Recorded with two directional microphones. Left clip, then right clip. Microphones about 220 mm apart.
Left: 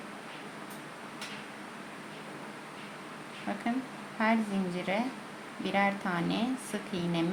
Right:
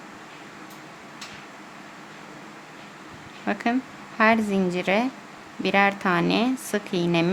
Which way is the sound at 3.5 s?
45° right (ahead or behind).